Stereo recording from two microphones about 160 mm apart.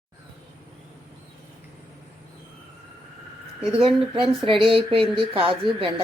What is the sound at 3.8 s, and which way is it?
Speech, 30° right (ahead or behind).